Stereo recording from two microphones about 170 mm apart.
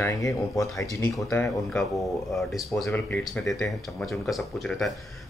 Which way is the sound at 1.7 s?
Centre (ahead or behind).